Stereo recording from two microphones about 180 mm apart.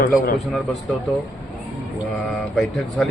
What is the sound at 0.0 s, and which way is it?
Speech, 50° left (ahead or behind).